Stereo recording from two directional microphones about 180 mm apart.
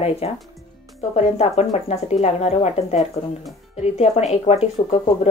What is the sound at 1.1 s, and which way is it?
Speech, 35° left (ahead or behind).